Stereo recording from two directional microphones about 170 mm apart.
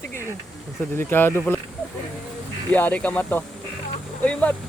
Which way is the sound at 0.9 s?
15° left (ahead or behind).